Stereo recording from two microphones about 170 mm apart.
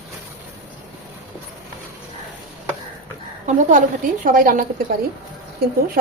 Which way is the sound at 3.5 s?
45° right (ahead or behind).